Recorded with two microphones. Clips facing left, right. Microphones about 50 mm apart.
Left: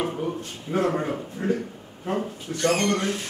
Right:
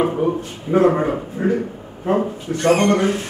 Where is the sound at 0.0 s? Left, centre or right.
Right.